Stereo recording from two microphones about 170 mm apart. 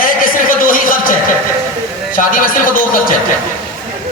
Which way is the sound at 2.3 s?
55° left (ahead or behind).